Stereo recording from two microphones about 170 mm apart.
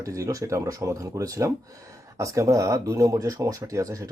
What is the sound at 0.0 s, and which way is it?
Speech, 20° right (ahead or behind).